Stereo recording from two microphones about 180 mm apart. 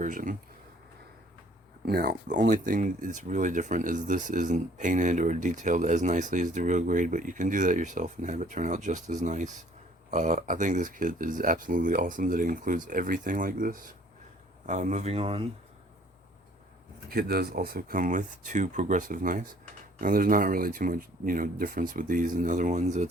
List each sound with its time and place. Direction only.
0.0 s speech: 50° right (ahead or behind)
1.8 s speech: 60° right (ahead or behind); by 15.4 s 30° right (ahead or behind)
17.1 s speech: 55° right (ahead or behind); by 23.0 s 40° right (ahead or behind)